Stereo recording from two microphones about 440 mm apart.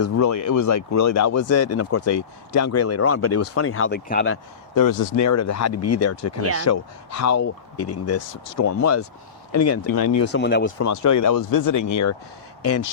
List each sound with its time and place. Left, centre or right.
0.0 s speech: left
4.7 s speech: left
9.9 s speech: left
10.2 s speech: left
10.8 s speech: left